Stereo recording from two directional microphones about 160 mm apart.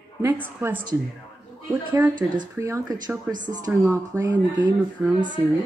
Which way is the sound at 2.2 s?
10° right (ahead or behind).